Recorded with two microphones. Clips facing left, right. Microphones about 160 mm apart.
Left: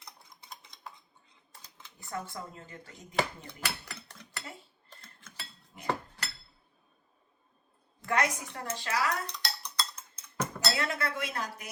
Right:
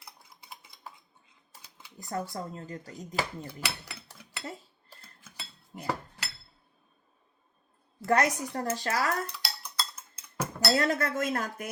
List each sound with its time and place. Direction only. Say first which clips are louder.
0.0 s typing: even; 10° right (ahead or behind)
2.0 s speech: right 5 dB; 40° right (ahead or behind)
3.2 s speech: left 2 dB; 5° right (ahead or behind)
4.9 s cutlery: right 1 dB; 10° right (ahead or behind)
8.0 s speech: right 4 dB; 40° right (ahead or behind)
9.2 s dishes: even; 5° right (ahead or behind)
10.8 s speech: right 7 dB; 40° right (ahead or behind)